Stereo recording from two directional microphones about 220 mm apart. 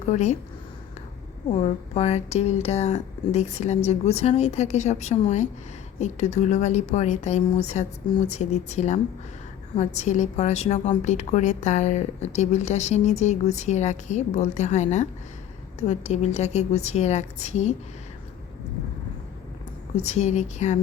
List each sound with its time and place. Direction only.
0.0 s a woman's voice: 30° left (ahead or behind)
1.5 s a woman's voice: 30° left (ahead or behind)
20.0 s a woman's voice: 30° left (ahead or behind)